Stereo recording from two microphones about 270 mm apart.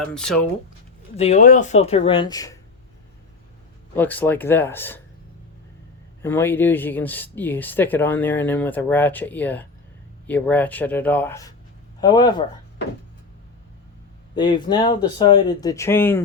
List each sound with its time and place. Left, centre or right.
0.0 s speech: centre
1.1 s speech: left
3.9 s speech: centre
6.2 s speech: centre
14.3 s speech: centre